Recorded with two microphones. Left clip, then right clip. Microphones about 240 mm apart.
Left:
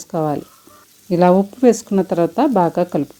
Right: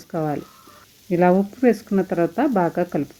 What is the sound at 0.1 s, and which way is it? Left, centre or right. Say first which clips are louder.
Speech: left 5 dB; left.